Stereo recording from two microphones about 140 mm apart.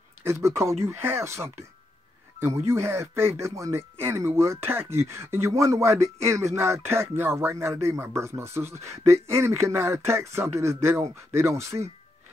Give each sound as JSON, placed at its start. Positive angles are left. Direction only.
{"t": 0.2, "sound": "speech", "side_deg": -20}